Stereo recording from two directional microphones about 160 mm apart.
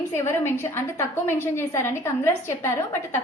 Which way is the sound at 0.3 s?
15° left (ahead or behind).